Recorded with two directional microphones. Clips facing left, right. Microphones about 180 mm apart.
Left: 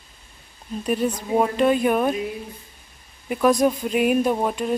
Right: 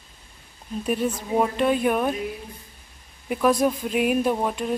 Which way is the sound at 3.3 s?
Centre (ahead or behind).